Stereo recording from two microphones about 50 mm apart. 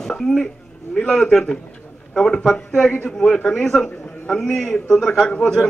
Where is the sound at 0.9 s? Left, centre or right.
Centre.